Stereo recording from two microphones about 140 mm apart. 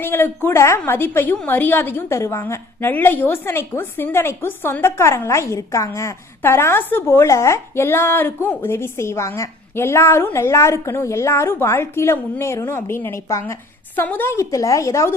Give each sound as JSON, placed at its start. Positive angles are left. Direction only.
{"t": 0.0, "sound": "a woman's voice", "side_deg": 15}